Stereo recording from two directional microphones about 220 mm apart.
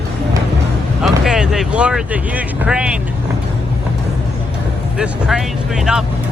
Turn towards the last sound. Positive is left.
turn(degrees=-5)  # may be behind; listen again after turning